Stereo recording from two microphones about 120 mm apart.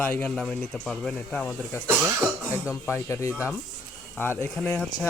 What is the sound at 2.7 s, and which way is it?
Speech, 20° left (ahead or behind).